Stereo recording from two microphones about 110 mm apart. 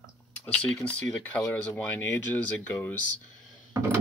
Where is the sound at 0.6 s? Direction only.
10° left (ahead or behind).